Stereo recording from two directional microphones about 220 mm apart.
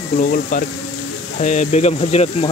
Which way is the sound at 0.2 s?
40° left (ahead or behind).